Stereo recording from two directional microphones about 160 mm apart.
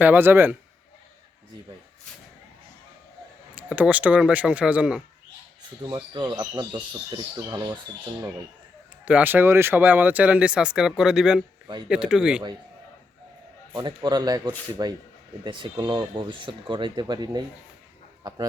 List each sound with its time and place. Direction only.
0.0 s speech: 10° right (ahead or behind)
3.5 s speech: 10° right (ahead or behind)
5.8 s speech: 30° right (ahead or behind)
9.0 s speech: 10° right (ahead or behind)
13.7 s speech: 25° right (ahead or behind)
18.2 s a sound: 25° right (ahead or behind)